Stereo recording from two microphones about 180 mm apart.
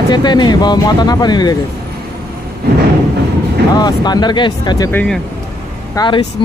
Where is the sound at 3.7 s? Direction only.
25° left (ahead or behind).